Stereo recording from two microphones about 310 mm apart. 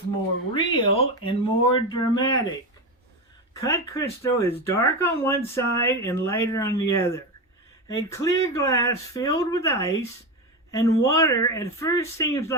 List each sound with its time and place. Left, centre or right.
0.5 s speech: centre
3.6 s speech: centre